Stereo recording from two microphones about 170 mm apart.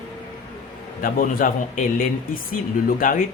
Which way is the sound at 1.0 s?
55° left (ahead or behind).